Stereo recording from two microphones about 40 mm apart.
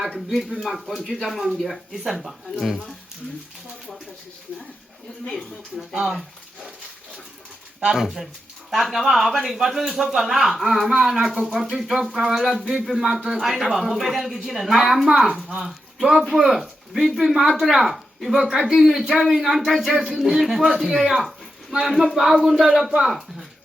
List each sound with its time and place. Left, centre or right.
0.3 s a man's voice: centre
5.3 s a man's voice: centre
5.9 s a man's voice: centre
7.9 s a man's voice: centre
11.4 s speech: right
12.1 s a man's voice: centre
18.4 s a man's voice: centre